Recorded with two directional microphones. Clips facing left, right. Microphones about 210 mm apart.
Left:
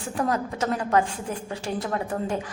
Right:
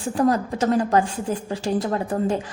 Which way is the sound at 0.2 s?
35° right (ahead or behind).